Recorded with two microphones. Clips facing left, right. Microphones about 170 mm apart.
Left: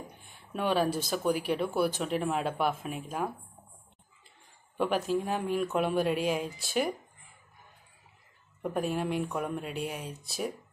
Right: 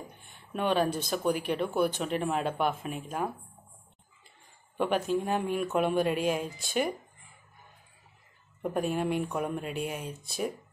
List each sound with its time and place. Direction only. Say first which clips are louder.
0.5 s speech: right 1 dB; 5° left (ahead or behind)
4.7 s speech: right 1 dB; centre (ahead or behind)
8.6 s speech: right 1 dB; centre (ahead or behind)